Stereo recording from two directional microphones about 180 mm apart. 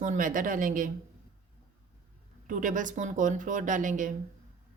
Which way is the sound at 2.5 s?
45° right (ahead or behind).